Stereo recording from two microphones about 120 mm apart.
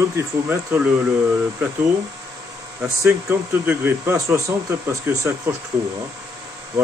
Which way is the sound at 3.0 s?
20° right (ahead or behind).